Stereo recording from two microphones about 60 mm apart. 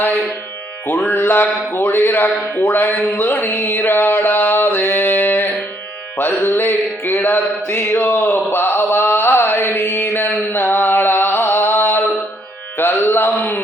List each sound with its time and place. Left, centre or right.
0.9 s speech: left
3.1 s a sound: left
6.1 s music: left
8.4 s mantra: left